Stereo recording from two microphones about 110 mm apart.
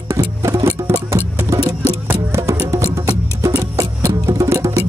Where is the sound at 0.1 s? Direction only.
30° right (ahead or behind).